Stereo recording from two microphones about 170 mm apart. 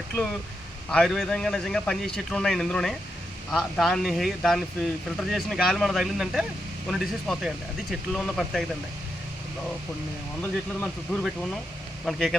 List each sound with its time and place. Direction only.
0.9 s speech: 5° left (ahead or behind)
10.4 s speech: 5° left (ahead or behind)